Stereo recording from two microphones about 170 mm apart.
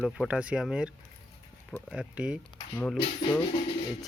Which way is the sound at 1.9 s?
5° right (ahead or behind).